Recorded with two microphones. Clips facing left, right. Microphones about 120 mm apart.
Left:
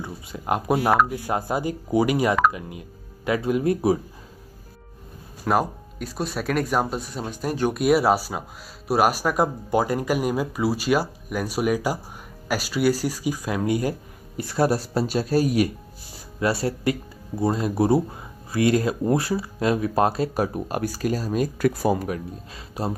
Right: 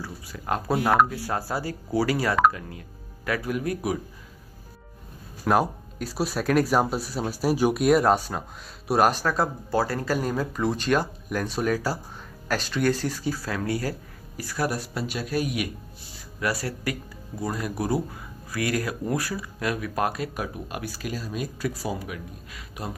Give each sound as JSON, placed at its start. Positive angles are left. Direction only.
{"t": 0.0, "sound": "speech", "side_deg": 20}
{"t": 5.4, "sound": "speech", "side_deg": 0}
{"t": 7.8, "sound": "speech", "side_deg": 5}
{"t": 16.3, "sound": "speech", "side_deg": 25}
{"t": 22.5, "sound": "speech", "side_deg": 30}